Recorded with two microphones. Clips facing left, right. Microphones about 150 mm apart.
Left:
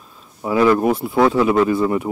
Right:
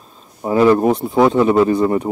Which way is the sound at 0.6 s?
25° right (ahead or behind).